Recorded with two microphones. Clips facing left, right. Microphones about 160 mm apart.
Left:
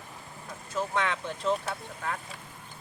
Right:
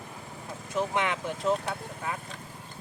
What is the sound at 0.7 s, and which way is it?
Speech, 15° right (ahead or behind).